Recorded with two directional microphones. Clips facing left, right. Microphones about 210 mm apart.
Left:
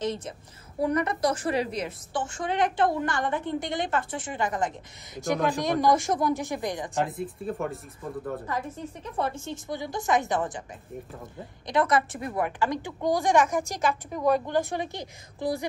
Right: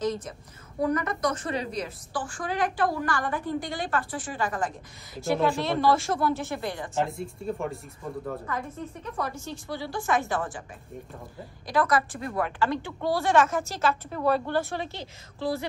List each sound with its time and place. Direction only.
0.0 s a woman's voice: 30° left (ahead or behind)
7.0 s speech: centre (ahead or behind)
9.2 s a woman's voice: 25° left (ahead or behind)
11.6 s a woman's voice: 20° left (ahead or behind)